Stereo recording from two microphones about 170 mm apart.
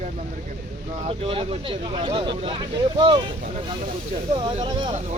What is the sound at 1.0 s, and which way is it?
Speech, 35° right (ahead or behind).